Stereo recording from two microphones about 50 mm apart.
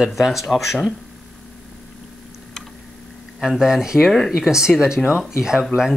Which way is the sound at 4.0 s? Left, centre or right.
Centre.